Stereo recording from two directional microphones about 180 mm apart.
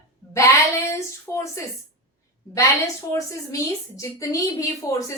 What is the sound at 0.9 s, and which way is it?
Speech, 15° left (ahead or behind).